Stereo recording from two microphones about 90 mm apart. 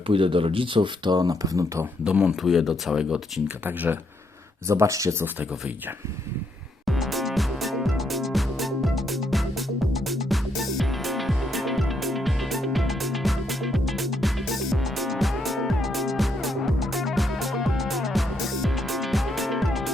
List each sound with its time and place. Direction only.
0.1 s speech: 85° right; by 1.9 s 35° right (ahead or behind)
2.0 s speech: 10° right (ahead or behind)
2.3 s speech: centre (ahead or behind)
3.6 s speech: 20° right (ahead or behind)
4.7 s speech: 35° right (ahead or behind)
5.2 s speech: 20° right (ahead or behind)
6.8 s music: centre (ahead or behind)